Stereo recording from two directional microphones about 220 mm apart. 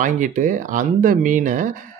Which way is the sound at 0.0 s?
35° right (ahead or behind).